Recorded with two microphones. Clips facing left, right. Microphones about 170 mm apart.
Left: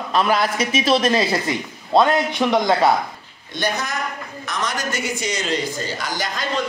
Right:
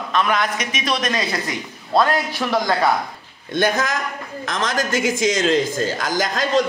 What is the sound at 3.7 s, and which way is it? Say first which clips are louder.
A woman's voice: right 3 dB; 90° right.